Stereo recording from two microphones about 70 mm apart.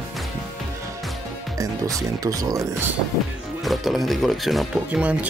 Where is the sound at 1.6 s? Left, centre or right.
Right.